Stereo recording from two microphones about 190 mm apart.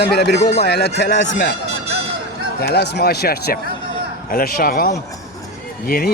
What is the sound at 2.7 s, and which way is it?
Speech, 60° left (ahead or behind).